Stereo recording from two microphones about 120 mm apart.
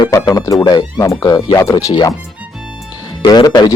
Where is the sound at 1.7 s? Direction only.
35° left (ahead or behind).